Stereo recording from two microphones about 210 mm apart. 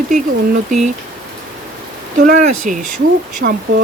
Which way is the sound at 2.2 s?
40° right (ahead or behind).